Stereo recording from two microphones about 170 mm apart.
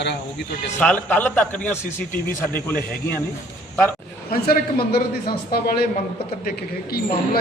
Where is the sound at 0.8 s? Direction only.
5° left (ahead or behind).